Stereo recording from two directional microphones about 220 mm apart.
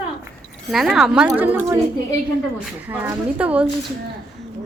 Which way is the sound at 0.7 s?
Centre (ahead or behind).